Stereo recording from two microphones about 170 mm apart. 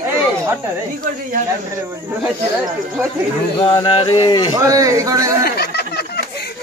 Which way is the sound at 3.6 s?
30° left (ahead or behind).